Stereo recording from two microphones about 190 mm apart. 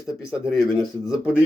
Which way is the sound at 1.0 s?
5° right (ahead or behind).